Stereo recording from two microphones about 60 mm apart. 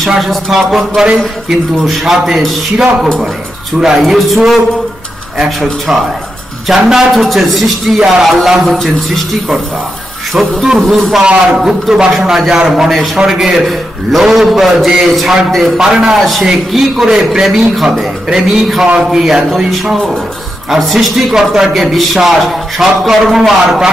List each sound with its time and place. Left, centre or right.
0.0 s a man's voice: centre
5.4 s a man's voice: centre
11.2 s a man's voice: centre